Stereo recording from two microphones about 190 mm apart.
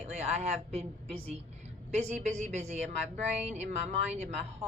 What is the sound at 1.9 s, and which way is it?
A woman's voice, 35° right (ahead or behind).